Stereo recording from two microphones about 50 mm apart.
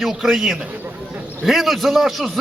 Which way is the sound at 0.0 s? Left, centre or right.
Centre.